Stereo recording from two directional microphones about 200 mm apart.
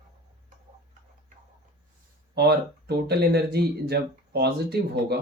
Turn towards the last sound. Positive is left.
turn(degrees=-50)  # may be behind; listen again after turning